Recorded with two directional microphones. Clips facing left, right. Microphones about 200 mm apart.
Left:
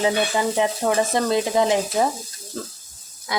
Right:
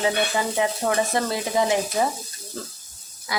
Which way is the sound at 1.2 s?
20° left (ahead or behind).